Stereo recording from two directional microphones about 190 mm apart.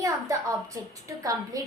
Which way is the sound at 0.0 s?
15° right (ahead or behind).